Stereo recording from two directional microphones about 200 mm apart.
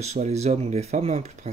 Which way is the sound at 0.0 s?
35° right (ahead or behind).